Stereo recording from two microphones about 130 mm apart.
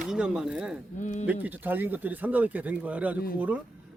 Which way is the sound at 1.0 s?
70° left (ahead or behind).